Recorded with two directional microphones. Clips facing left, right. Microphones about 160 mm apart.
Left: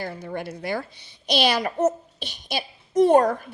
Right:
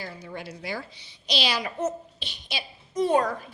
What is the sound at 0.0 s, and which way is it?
A woman's voice, 55° left (ahead or behind).